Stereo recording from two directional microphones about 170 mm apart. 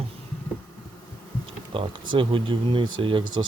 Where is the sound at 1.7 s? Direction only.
30° right (ahead or behind).